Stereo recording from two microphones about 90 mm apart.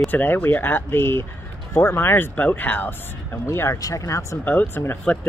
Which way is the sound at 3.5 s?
30° left (ahead or behind).